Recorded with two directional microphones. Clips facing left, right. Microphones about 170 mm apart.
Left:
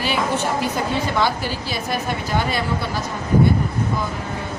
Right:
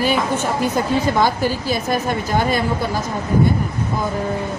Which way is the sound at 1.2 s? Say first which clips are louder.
Right 4 dB; 45° right (ahead or behind).